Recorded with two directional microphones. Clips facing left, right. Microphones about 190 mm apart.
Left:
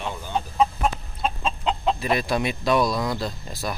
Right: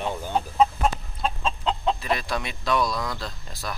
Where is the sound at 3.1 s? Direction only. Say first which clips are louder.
Left 6 dB; 10° left (ahead or behind).